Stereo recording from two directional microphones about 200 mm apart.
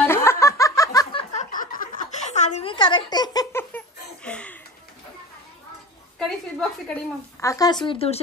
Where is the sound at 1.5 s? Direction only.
40° left (ahead or behind); by 4.6 s 5° left (ahead or behind).